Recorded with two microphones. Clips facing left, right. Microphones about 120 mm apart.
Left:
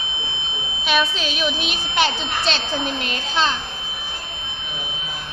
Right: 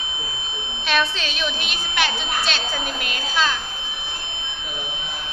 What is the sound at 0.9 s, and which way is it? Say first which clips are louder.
A child's voice: left 1 dB; 10° left (ahead or behind).